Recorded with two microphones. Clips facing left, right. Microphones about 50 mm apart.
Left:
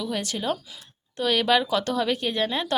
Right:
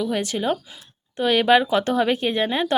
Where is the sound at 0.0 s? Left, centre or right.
Right.